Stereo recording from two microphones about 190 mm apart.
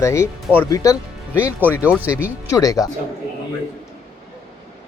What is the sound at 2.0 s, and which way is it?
Speech, 10° right (ahead or behind).